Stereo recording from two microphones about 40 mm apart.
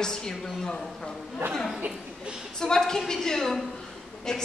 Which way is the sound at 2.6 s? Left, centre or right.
Centre.